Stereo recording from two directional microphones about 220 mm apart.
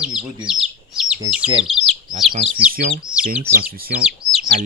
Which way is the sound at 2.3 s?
35° right (ahead or behind).